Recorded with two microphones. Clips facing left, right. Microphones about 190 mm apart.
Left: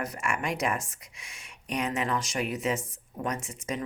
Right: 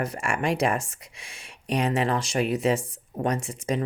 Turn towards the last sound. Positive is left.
turn(degrees=-30)  # may be behind; listen again after turning